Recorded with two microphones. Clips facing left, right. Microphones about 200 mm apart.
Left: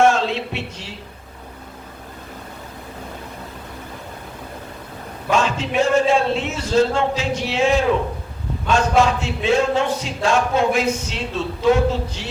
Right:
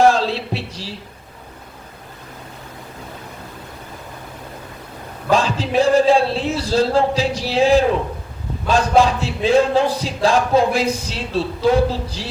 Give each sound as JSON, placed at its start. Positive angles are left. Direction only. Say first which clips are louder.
{"t": 0.0, "sound": "music", "louder": "right 2 dB", "side_deg": -35}
{"t": 5.3, "sound": "a man's voice", "louder": "right 2 dB", "side_deg": -35}